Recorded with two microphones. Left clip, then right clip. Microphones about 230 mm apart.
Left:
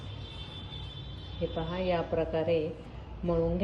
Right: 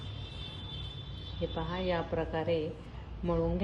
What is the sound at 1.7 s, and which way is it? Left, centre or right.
A woman's voice, centre.